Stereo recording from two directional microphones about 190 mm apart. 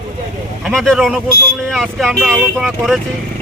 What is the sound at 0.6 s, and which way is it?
Speech, centre (ahead or behind).